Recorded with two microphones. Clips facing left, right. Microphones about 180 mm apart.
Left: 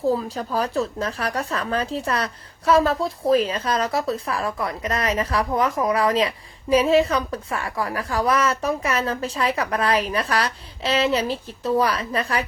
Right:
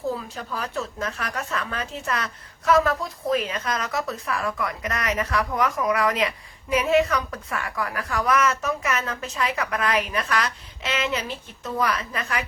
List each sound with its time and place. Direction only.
0.2 s speech: 35° left (ahead or behind)